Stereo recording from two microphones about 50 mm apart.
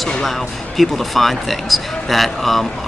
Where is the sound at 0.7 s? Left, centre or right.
Centre.